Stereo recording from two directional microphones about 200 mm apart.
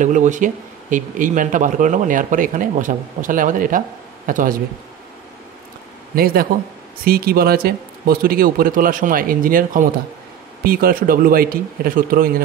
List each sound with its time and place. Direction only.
0.0 s speech: 40° right (ahead or behind)
6.1 s speech: 50° right (ahead or behind)